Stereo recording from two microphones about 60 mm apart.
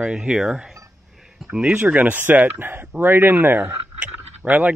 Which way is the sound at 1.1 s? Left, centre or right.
Centre.